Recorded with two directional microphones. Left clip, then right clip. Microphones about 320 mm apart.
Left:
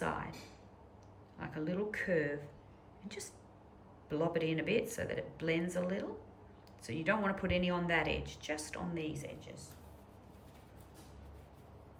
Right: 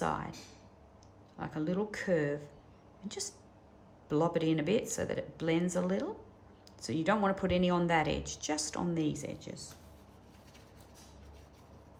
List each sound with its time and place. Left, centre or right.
0.0 s a sound: centre
1.4 s speech: centre
4.1 s speech: centre